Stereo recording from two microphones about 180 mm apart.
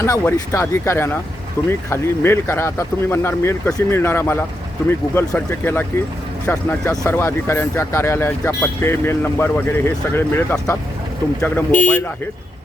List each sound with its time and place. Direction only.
0.0 s speech: 15° left (ahead or behind)